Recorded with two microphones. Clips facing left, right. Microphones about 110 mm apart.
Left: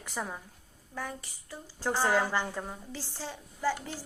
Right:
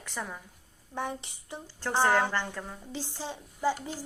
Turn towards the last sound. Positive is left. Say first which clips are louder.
# right 2 dB
turn(degrees=-15)  # may be behind; listen again after turning